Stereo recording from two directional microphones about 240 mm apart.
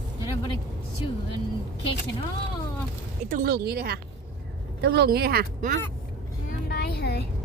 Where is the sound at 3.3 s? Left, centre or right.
Right.